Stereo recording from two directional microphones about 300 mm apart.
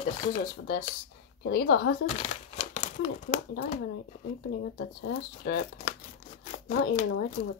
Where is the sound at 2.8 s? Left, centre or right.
Left.